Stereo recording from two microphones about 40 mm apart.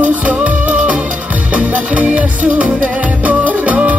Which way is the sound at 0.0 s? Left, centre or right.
Right.